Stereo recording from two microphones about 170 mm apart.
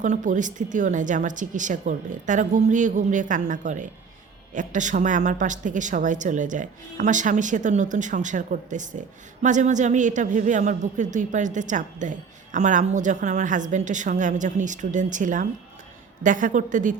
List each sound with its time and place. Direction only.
0.0 s a woman's voice: 45° right (ahead or behind)